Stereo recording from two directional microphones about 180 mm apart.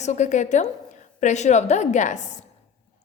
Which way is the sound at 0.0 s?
40° left (ahead or behind).